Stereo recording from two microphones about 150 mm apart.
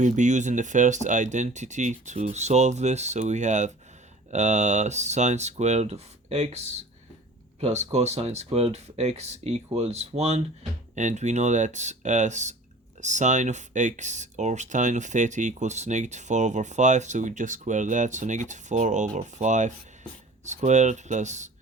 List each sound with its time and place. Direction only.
0.0 s speech: 55° right (ahead or behind)
7.6 s speech: 45° right (ahead or behind)